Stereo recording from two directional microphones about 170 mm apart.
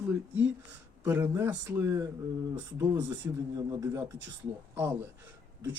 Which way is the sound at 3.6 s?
20° right (ahead or behind).